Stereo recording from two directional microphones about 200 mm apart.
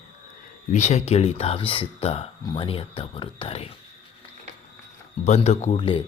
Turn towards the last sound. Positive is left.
turn(degrees=25)  # may be behind; listen again after turning